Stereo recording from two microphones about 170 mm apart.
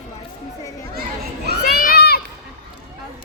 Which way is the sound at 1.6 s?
60° left (ahead or behind).